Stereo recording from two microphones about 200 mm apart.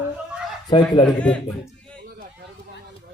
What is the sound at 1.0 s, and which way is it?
Speech, 5° left (ahead or behind).